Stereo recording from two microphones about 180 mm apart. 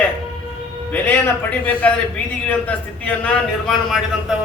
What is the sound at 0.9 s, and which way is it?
A man's voice, 10° left (ahead or behind).